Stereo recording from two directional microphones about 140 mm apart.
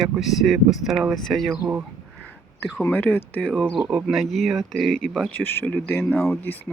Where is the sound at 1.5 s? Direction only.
10° right (ahead or behind).